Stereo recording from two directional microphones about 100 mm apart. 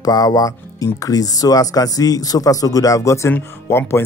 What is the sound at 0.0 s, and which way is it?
Speech, 40° left (ahead or behind).